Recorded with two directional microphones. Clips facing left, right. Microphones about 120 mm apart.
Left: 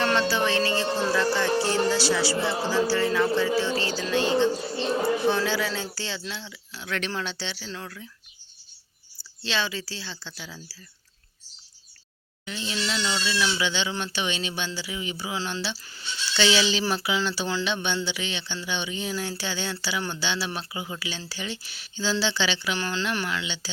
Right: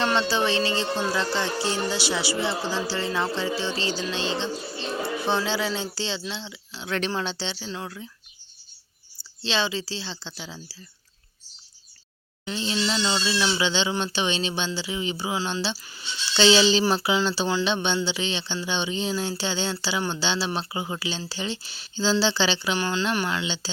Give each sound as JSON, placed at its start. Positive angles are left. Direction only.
{"t": 0.0, "sound": "music", "side_deg": -25}
{"t": 9.4, "sound": "music", "side_deg": -25}
{"t": 12.5, "sound": "music", "side_deg": -30}
{"t": 15.9, "sound": "speech", "side_deg": -15}
{"t": 16.4, "sound": "speech", "side_deg": -30}
{"t": 16.9, "sound": "music", "side_deg": -30}
{"t": 22.8, "sound": "speech", "side_deg": -15}
{"t": 23.1, "sound": "music", "side_deg": -25}